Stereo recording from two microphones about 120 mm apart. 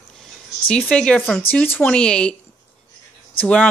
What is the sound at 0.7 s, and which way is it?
Speech, 5° left (ahead or behind).